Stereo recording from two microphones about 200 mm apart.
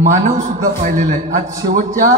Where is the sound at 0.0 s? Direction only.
35° right (ahead or behind).